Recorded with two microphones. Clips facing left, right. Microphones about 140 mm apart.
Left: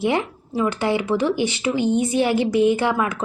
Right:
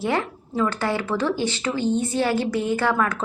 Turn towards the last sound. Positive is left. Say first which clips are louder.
# left 2 dB
turn(degrees=15)  # may be behind; listen again after turning